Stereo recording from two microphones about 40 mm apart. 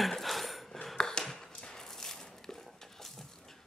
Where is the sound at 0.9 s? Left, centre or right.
Centre.